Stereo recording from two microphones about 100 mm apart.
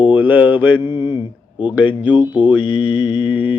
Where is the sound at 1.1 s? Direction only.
50° left (ahead or behind).